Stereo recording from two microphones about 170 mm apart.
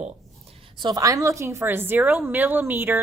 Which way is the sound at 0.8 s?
20° right (ahead or behind).